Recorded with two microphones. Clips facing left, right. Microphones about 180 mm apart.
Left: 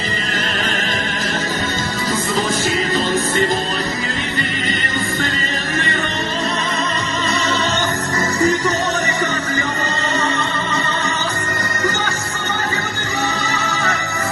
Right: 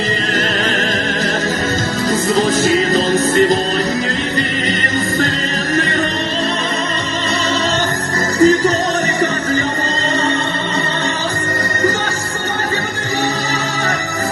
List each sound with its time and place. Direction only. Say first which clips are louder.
8.4 s music: right 7 dB; 35° right (ahead or behind)